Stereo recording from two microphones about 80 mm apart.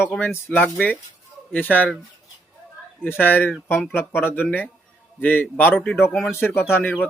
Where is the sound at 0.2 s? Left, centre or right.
Left.